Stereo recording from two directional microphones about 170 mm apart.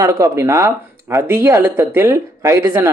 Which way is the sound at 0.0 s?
20° right (ahead or behind).